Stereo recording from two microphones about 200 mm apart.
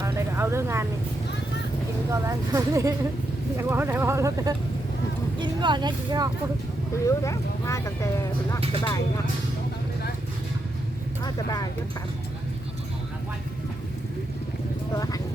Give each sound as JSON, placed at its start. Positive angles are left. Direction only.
{"t": 0.0, "sound": "a sound", "side_deg": -15}
{"t": 2.0, "sound": "speech", "side_deg": -15}
{"t": 7.0, "sound": "speech", "side_deg": 15}
{"t": 11.2, "sound": "speech", "side_deg": 20}
{"t": 14.9, "sound": "speech", "side_deg": 20}